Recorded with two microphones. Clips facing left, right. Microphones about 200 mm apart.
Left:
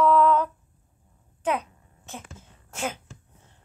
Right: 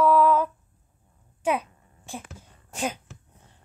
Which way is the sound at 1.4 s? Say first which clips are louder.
Right 1 dB; 10° right (ahead or behind).